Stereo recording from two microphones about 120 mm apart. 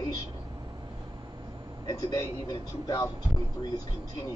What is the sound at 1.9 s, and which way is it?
Speech, 35° left (ahead or behind).